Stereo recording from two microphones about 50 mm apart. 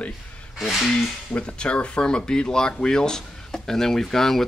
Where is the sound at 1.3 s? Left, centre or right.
Left.